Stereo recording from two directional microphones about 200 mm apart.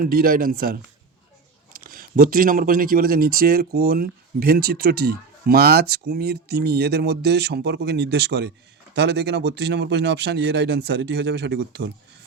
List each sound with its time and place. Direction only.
0.0 s speech: 45° right (ahead or behind)